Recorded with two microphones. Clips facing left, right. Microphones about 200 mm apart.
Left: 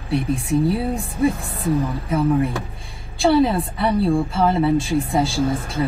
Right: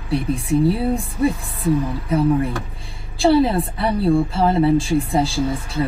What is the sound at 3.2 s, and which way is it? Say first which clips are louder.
Speech: right 1 dB; 30° right (ahead or behind).